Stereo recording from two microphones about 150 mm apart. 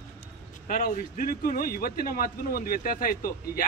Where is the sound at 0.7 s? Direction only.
70° left (ahead or behind).